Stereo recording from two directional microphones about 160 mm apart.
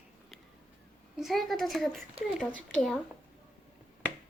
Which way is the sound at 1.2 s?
Centre (ahead or behind).